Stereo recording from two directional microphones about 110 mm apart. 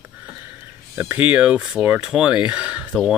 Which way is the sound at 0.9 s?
15° right (ahead or behind).